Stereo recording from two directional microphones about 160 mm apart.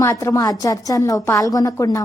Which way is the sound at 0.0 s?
20° left (ahead or behind).